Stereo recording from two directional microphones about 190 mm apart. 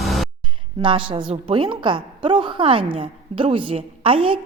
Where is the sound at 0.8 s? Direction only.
25° right (ahead or behind).